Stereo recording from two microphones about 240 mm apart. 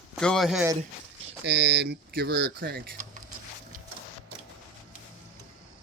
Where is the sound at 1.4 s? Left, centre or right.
Right.